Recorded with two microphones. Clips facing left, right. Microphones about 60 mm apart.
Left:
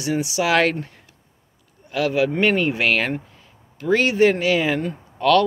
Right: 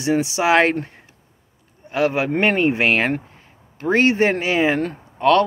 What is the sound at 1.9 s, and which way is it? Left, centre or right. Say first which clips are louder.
Speech: right 1 dB; right.